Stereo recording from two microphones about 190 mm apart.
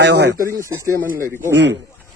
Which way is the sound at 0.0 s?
60° right (ahead or behind).